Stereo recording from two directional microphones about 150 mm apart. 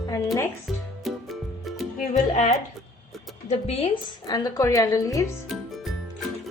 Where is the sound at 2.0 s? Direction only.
50° left (ahead or behind).